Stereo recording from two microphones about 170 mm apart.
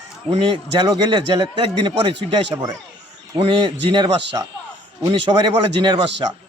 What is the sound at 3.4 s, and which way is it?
Speech, 30° right (ahead or behind).